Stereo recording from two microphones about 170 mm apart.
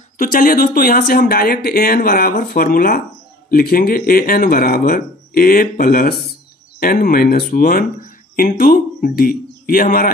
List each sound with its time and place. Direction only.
0.2 s speech: 55° left (ahead or behind)